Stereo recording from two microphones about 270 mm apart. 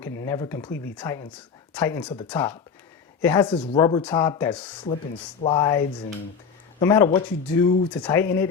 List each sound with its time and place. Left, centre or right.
0.2 s speech: centre
5.4 s speech: centre